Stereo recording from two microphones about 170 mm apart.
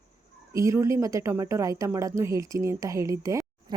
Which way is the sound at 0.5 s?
15° right (ahead or behind).